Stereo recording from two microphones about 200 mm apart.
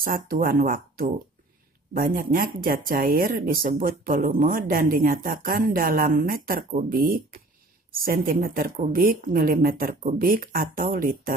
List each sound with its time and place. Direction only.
0.0 s speech: 45° right (ahead or behind)